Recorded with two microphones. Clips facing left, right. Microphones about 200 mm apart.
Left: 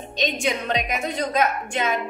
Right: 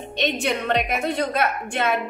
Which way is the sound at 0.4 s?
60° right (ahead or behind).